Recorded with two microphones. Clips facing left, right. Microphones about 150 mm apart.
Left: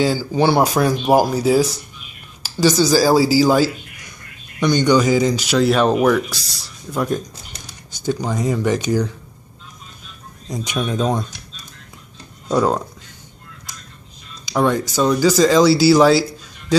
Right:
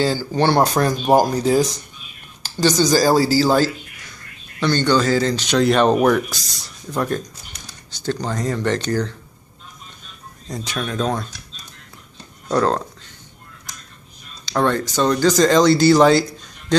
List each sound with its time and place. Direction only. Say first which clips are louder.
0.0 s speech: left 2 dB; 10° left (ahead or behind)
10.5 s speech: left 3 dB; 15° left (ahead or behind)
12.4 s speech: left 1 dB; 10° left (ahead or behind)
14.4 s speech: left 1 dB; 10° left (ahead or behind)